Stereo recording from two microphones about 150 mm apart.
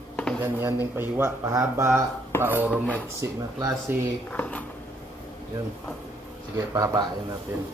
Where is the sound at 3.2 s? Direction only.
20° right (ahead or behind).